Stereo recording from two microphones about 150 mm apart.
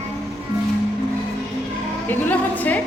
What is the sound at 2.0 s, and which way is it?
Music, 10° left (ahead or behind).